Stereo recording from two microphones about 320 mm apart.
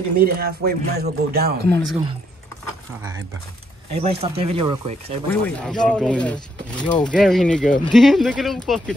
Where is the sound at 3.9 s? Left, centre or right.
Centre.